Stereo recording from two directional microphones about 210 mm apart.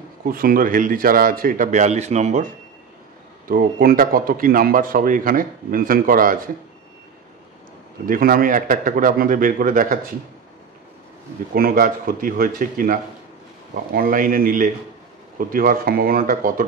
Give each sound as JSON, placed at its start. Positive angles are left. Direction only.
{"t": 0.2, "sound": "speech", "side_deg": -45}
{"t": 3.4, "sound": "speech", "side_deg": -45}
{"t": 8.1, "sound": "speech", "side_deg": -45}
{"t": 11.5, "sound": "speech", "side_deg": -45}